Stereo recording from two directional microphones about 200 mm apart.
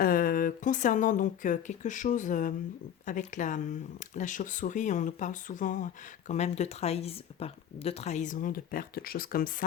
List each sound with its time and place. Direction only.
0.0 s speech: 45° left (ahead or behind)